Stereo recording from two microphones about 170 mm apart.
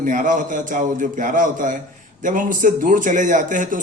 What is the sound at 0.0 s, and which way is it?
A man's voice, 50° right (ahead or behind).